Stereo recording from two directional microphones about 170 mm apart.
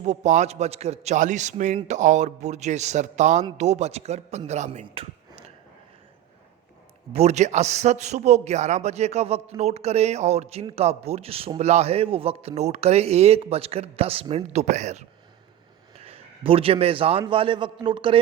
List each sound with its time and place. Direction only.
0.0 s a man's voice: 40° right (ahead or behind)
7.1 s a man's voice: 40° right (ahead or behind)